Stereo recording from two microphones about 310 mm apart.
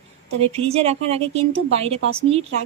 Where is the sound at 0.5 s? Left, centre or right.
Centre.